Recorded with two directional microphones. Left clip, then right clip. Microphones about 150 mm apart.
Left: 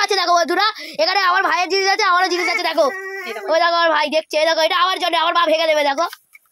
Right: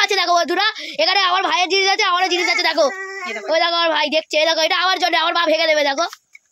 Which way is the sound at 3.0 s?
5° left (ahead or behind).